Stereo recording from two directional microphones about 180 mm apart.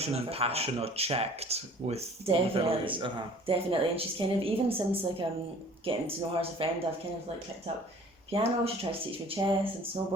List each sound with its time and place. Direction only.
0.0 s speech: 35° right (ahead or behind)
8.3 s speech: 35° right (ahead or behind)